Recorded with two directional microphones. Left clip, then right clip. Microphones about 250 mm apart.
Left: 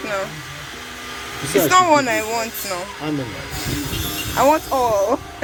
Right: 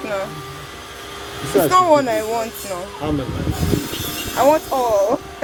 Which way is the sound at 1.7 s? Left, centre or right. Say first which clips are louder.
Even; centre.